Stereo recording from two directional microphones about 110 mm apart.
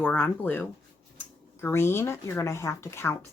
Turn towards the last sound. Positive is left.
turn(degrees=25)  # may be behind; listen again after turning